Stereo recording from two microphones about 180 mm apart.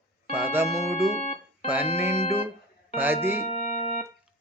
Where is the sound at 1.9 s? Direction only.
15° right (ahead or behind).